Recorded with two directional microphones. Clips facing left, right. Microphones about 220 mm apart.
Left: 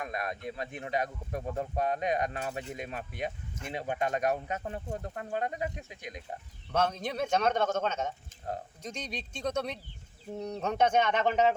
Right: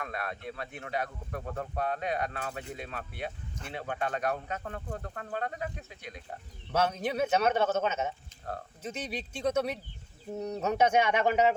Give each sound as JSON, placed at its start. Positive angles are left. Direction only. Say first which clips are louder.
{"t": 0.0, "sound": "speech", "louder": "left 2 dB", "side_deg": 15}
{"t": 6.7, "sound": "a man's voice", "louder": "right 1 dB", "side_deg": -10}